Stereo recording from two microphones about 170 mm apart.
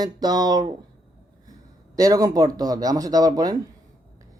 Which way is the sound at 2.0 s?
20° right (ahead or behind).